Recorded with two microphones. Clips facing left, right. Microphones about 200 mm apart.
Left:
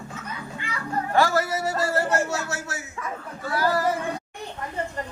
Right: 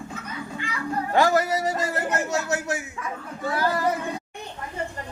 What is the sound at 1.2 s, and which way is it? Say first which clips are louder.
A man's voice: right 2 dB; 20° right (ahead or behind).